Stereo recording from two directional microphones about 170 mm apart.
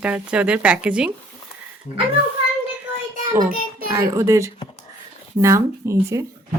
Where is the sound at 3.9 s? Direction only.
20° right (ahead or behind).